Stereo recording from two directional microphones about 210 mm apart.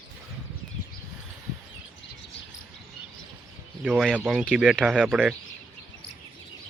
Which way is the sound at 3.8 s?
Centre (ahead or behind).